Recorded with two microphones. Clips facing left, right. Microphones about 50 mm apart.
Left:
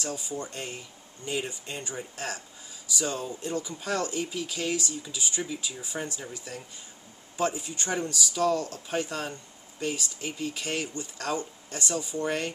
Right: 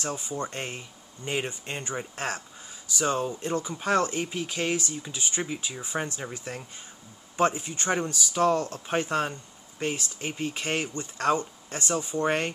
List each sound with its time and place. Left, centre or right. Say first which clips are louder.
0.0 s speech: right 2 dB; right